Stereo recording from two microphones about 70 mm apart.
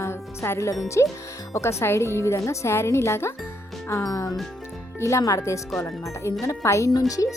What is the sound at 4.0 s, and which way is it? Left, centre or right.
Speech, left.